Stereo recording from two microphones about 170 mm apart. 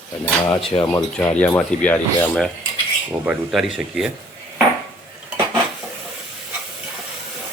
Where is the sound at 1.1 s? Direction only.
5° left (ahead or behind).